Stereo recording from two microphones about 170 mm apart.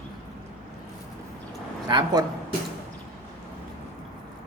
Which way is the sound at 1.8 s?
25° right (ahead or behind).